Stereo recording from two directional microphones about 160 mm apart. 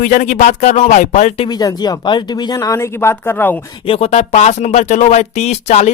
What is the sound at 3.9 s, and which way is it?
Speech, 40° left (ahead or behind).